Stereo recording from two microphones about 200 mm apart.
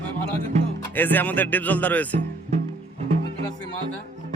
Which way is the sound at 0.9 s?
10° left (ahead or behind).